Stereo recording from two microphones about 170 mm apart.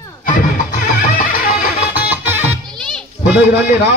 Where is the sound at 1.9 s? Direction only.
10° right (ahead or behind).